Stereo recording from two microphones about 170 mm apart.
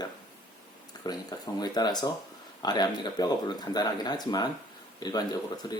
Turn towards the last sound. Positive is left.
turn(degrees=25)  # may be behind; listen again after turning